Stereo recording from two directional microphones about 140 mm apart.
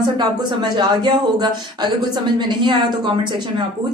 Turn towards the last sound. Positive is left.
turn(degrees=-30)  # may be behind; listen again after turning